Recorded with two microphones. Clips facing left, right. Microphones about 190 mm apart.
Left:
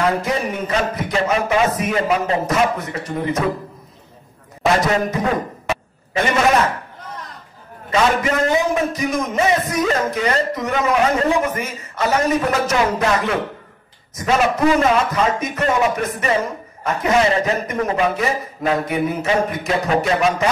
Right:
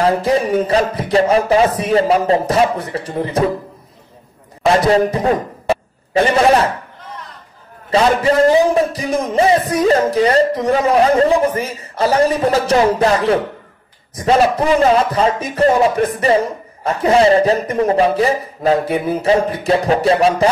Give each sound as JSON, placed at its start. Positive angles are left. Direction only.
{"t": 0.0, "sound": "a man's voice", "side_deg": -30}
{"t": 4.8, "sound": "a man's voice", "side_deg": -35}
{"t": 7.9, "sound": "a man's voice", "side_deg": -30}